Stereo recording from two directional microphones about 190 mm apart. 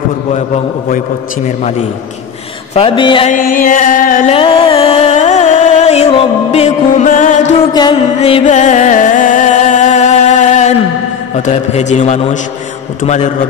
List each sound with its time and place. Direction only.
0.8 s a man's voice: 40° left (ahead or behind)
2.7 s speech: 25° left (ahead or behind)
3.3 s music: 45° left (ahead or behind)
4.4 s music: 30° left (ahead or behind)
7.7 s speech: 20° left (ahead or behind)
8.2 s music: 30° left (ahead or behind)
11.3 s a man's voice: 35° left (ahead or behind)